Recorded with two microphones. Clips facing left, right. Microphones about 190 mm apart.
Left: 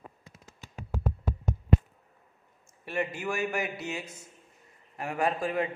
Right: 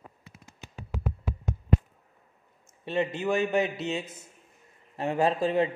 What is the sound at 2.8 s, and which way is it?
A man's voice, 20° right (ahead or behind).